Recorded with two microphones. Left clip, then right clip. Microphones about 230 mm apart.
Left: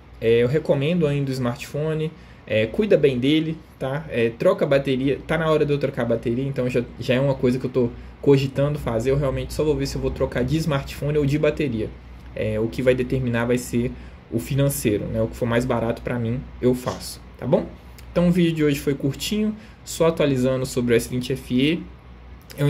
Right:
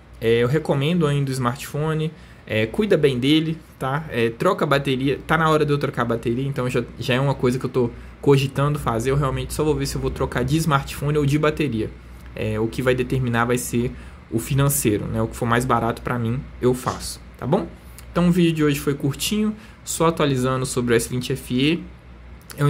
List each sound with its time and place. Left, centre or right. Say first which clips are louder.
0.2 s speech: left 1 dB; centre